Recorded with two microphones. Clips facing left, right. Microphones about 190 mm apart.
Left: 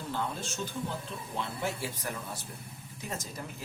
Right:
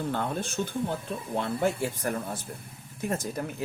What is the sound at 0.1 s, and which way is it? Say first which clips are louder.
Speech: right 5 dB; 55° right (ahead or behind).